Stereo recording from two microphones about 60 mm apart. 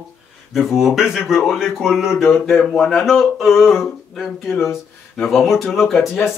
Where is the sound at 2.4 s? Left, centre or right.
Centre.